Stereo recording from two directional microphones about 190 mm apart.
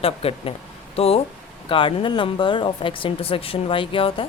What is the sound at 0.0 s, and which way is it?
Speech, 30° left (ahead or behind).